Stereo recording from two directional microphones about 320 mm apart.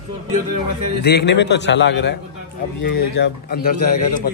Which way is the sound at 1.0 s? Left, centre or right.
Left.